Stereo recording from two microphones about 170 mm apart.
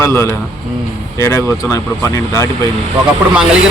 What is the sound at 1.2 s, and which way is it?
Speech, 15° left (ahead or behind).